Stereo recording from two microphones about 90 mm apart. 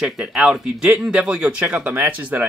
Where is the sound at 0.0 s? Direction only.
10° right (ahead or behind).